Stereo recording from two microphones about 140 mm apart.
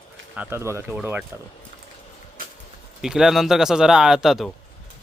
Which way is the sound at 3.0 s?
5° right (ahead or behind).